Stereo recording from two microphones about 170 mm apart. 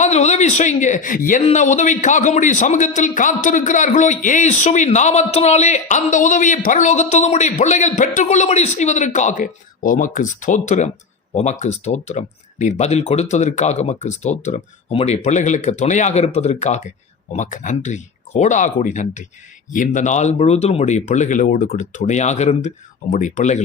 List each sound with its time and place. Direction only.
0.0 s a man's voice: 40° left (ahead or behind)